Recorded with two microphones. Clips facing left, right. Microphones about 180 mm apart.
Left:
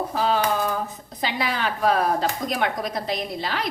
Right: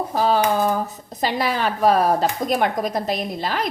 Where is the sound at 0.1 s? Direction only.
40° right (ahead or behind).